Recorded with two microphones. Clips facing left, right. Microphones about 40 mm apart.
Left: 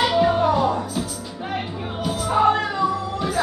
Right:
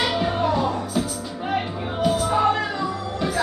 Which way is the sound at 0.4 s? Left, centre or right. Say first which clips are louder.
Left 3 dB; centre.